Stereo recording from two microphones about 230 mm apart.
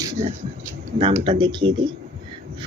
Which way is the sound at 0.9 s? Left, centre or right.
Right.